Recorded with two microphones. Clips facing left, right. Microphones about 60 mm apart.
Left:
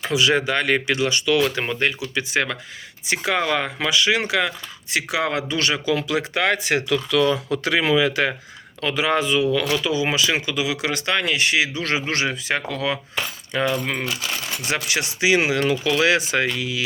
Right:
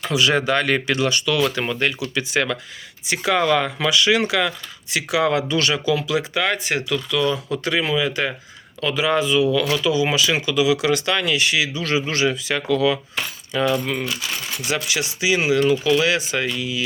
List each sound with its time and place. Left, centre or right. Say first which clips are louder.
0.0 s speech: even; centre; by 6.8 s left
6.8 s speech: left 2 dB; left
8.8 s speech: right 1 dB; left
15.7 s speech: right 1 dB; left